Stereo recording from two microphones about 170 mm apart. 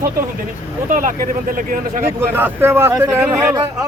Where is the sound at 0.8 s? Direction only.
50° right (ahead or behind).